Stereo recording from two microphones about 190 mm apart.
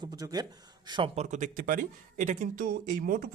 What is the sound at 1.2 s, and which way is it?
Speech, 40° right (ahead or behind).